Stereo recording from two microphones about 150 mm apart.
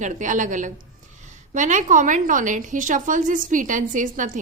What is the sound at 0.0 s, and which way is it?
A woman's voice, 55° right (ahead or behind).